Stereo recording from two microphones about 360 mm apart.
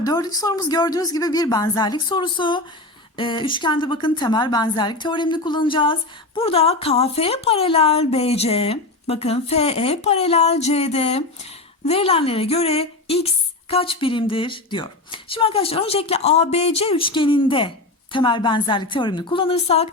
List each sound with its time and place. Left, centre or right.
0.0 s a woman's voice: centre